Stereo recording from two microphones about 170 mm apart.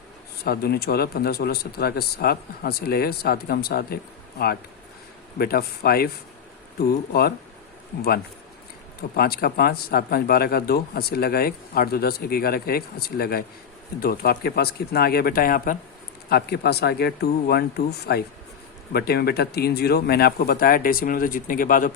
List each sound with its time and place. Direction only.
0.4 s a man's voice: 65° left (ahead or behind)
5.4 s a man's voice: 65° left (ahead or behind)
7.1 s a man's voice: 65° left (ahead or behind)
9.0 s a man's voice: 65° left (ahead or behind)
16.3 s a man's voice: 70° left (ahead or behind); by 21.9 s 55° left (ahead or behind)